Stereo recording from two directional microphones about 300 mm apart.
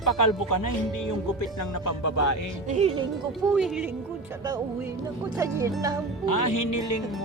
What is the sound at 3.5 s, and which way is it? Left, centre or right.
Speech, centre.